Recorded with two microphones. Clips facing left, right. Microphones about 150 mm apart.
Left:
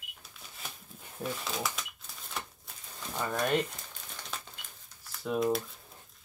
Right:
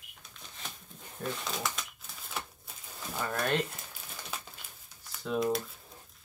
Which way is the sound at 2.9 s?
5° right (ahead or behind).